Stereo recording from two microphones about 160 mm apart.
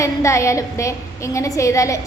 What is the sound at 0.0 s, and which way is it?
A woman's voice, 20° left (ahead or behind).